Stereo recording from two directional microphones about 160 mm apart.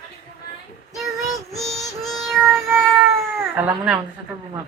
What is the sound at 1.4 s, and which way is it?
Child singing, centre (ahead or behind).